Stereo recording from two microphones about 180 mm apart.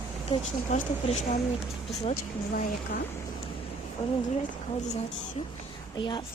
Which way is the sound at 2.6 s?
50° left (ahead or behind).